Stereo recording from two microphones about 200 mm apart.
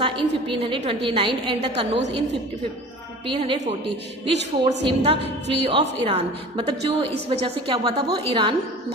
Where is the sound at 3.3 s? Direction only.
30° right (ahead or behind).